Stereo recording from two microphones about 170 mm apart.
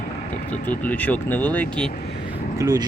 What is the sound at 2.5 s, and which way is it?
Speech, 20° right (ahead or behind).